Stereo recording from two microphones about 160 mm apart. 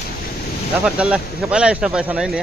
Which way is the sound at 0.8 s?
5° right (ahead or behind).